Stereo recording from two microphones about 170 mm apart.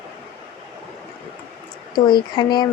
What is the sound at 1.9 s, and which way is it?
Speech, 25° left (ahead or behind).